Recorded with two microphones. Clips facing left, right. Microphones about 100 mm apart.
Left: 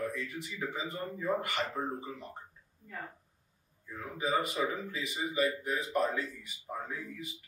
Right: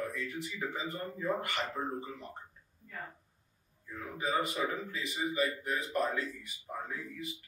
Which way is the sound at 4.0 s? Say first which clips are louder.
Left 1 dB; centre (ahead or behind).